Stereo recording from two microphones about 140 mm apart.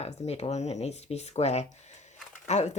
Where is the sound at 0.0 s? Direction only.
50° left (ahead or behind).